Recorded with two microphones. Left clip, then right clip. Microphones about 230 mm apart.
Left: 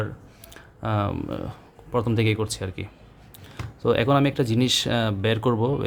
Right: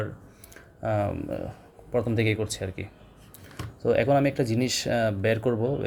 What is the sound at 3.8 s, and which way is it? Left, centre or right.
Speech, centre.